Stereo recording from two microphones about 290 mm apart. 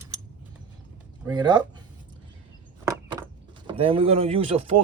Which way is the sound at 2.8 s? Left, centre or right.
Centre.